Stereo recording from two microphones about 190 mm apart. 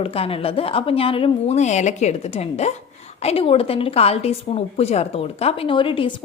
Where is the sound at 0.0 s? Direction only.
30° left (ahead or behind).